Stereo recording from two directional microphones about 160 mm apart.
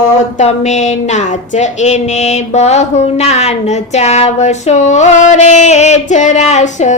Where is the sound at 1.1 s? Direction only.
45° left (ahead or behind).